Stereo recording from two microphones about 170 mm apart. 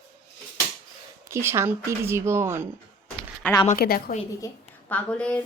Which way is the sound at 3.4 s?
10° left (ahead or behind).